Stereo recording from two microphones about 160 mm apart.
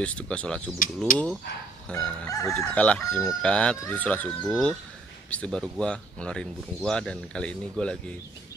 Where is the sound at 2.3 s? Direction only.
20° left (ahead or behind).